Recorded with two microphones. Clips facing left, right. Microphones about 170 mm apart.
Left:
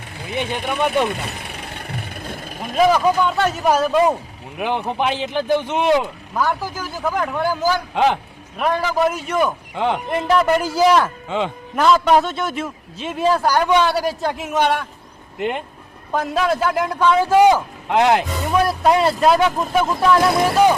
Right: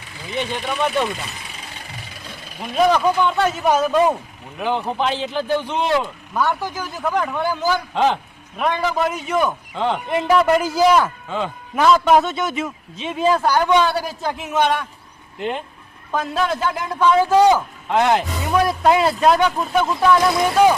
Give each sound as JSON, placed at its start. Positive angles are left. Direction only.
{"t": 0.1, "sound": "vehicle", "side_deg": 55}
{"t": 0.5, "sound": "a man's voice", "side_deg": 15}
{"t": 1.0, "sound": "vehicle", "side_deg": 60}
{"t": 2.7, "sound": "a man's voice", "side_deg": 5}
{"t": 8.5, "sound": "a man's voice", "side_deg": 0}
{"t": 9.7, "sound": "a man's voice", "side_deg": 15}
{"t": 10.1, "sound": "a man's voice", "side_deg": 0}
{"t": 11.3, "sound": "speech", "side_deg": 20}
{"t": 11.8, "sound": "a man's voice", "side_deg": 0}
{"t": 18.4, "sound": "a man's voice", "side_deg": 0}